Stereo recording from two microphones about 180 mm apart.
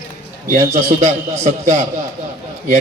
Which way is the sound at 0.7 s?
40° right (ahead or behind).